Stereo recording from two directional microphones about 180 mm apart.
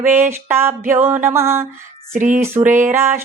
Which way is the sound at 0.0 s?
15° right (ahead or behind).